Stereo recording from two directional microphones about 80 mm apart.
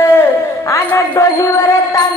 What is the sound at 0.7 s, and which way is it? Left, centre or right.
Music, left.